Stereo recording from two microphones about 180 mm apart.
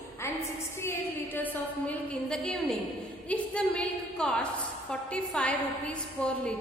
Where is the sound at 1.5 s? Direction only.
5° left (ahead or behind).